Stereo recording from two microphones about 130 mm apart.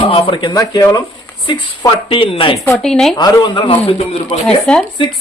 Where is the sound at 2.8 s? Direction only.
5° left (ahead or behind).